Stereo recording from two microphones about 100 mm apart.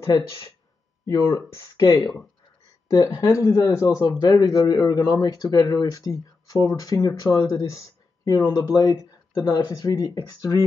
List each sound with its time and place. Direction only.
1.0 s speech: 30° left (ahead or behind)
3.3 s speech: 35° left (ahead or behind)